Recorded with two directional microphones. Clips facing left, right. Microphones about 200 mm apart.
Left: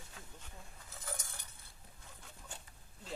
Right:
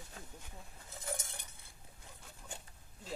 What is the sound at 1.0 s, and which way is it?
Cutlery, 25° right (ahead or behind).